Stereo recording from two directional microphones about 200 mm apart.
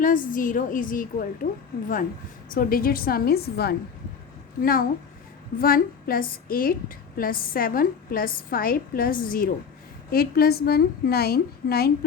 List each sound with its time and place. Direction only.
0.0 s a woman's voice: 45° left (ahead or behind)
2.5 s a woman's voice: 45° left (ahead or behind)